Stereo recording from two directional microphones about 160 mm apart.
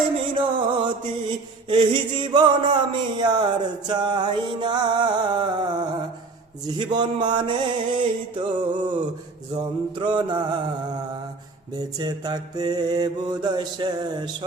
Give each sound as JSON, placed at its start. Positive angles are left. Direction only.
{"t": 0.3, "sound": "music", "side_deg": -30}